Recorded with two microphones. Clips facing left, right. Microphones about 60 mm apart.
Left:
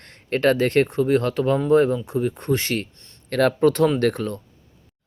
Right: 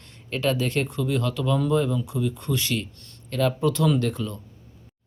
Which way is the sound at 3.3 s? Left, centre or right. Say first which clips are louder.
Left 5 dB; left.